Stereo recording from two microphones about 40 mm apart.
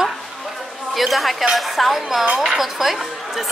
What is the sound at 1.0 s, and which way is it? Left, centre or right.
A woman's voice, centre.